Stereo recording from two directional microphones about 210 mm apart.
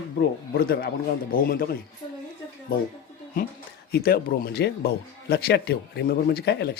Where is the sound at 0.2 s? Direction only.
45° left (ahead or behind).